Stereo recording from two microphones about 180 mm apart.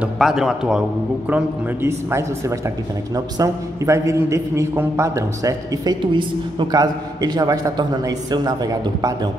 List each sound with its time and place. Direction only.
0.0 s a man's voice: centre (ahead or behind)
1.3 s a man's voice: 15° right (ahead or behind)